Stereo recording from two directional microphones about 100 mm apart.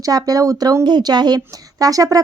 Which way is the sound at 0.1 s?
35° right (ahead or behind).